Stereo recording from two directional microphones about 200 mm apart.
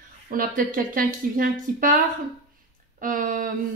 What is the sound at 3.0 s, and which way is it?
Speech, 40° right (ahead or behind).